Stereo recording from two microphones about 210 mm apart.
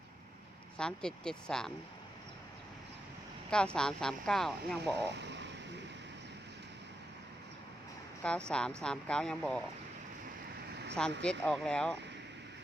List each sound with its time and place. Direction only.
0.8 s speech: 5° left (ahead or behind)
3.5 s speech: 5° left (ahead or behind)
5.0 s speech: 55° right (ahead or behind)
8.2 s speech: 5° left (ahead or behind)
11.2 s speech: 5° left (ahead or behind)